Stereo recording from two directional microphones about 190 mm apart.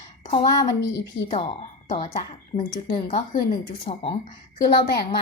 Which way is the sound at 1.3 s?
30° left (ahead or behind).